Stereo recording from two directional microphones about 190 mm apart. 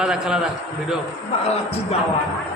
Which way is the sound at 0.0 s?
5° right (ahead or behind).